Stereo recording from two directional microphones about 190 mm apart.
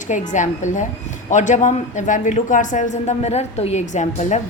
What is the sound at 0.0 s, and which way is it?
A woman's voice, 40° left (ahead or behind).